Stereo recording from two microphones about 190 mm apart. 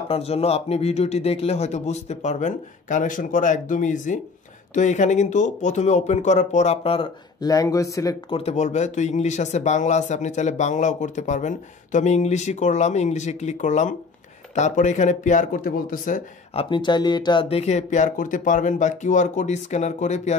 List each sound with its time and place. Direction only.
0.1 s speech: 35° left (ahead or behind); by 8.4 s 20° left (ahead or behind)
8.4 s speech: 35° left (ahead or behind)
16.5 s speech: 25° left (ahead or behind)